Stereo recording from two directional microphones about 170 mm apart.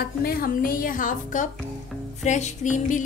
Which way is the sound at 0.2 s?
60° left (ahead or behind).